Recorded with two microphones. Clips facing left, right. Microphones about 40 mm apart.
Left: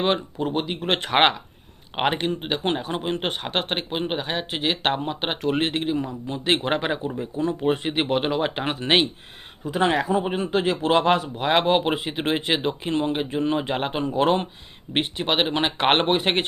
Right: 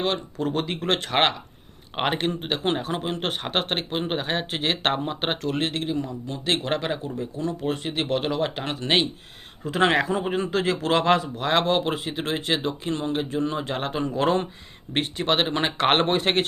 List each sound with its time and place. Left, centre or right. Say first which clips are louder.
0.0 s speech: left 2 dB; left
2.0 s speech: left 1 dB; centre
5.4 s speech: left 3 dB; centre
9.7 s speech: right 1 dB; right
10.1 s speech: left 2 dB; centre